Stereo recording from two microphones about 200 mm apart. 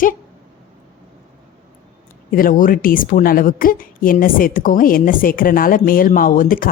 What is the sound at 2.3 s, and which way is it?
A woman's voice, 45° left (ahead or behind).